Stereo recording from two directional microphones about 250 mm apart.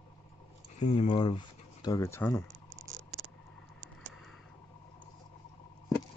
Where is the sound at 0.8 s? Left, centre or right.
Left; by 2.4 s centre.